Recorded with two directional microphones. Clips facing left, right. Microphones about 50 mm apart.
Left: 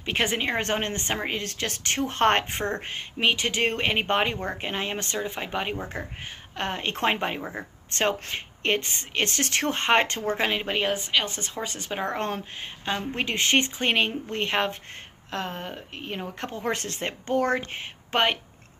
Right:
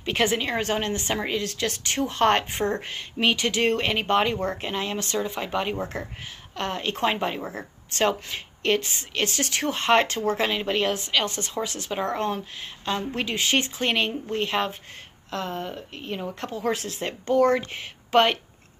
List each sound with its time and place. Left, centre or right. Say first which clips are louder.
0.0 s a woman's voice: right 2 dB; centre
0.6 s speech: right 1 dB; left
2.8 s speech: right 1 dB; centre; by 7.3 s left
7.3 s speech: right 1 dB; centre
8.0 s speech: right 2 dB; left
12.1 s speech: right 2 dB; left
12.8 s speech: right 2 dB; left
13.2 s speech: left 3 dB; left
13.7 s speech: left 1 dB; left
14.3 s speech: right 1 dB; left
15.3 s speech: right 2 dB; left
16.7 s speech: right 1 dB; left
17.0 s speech: right 5 dB; left